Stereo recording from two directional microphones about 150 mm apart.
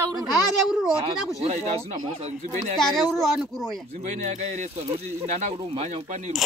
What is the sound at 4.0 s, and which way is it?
Speech, 50° right (ahead or behind).